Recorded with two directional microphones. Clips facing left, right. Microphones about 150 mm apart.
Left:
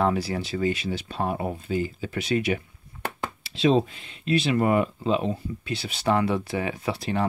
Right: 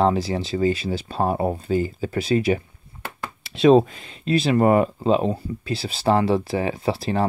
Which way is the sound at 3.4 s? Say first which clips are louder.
Right 7 dB; 55° right (ahead or behind).